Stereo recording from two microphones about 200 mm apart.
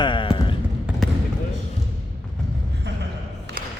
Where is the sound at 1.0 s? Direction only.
Centre (ahead or behind).